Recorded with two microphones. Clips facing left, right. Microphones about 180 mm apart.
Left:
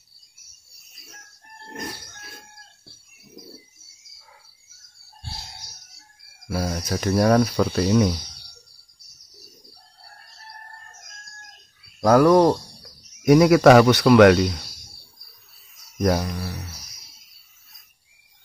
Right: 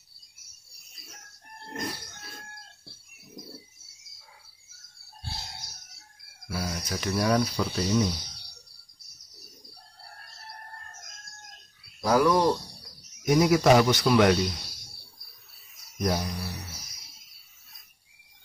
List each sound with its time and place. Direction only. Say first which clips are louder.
6.5 s speech: left 7 dB; 45° left (ahead or behind); by 8.1 s 65° left (ahead or behind)
12.0 s speech: left 7 dB; 60° left (ahead or behind)
16.0 s speech: left 7 dB; 65° left (ahead or behind)